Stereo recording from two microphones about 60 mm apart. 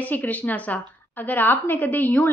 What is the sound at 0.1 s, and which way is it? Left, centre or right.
A woman's voice, left.